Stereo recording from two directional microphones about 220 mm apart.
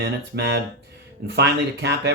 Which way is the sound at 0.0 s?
50° right (ahead or behind).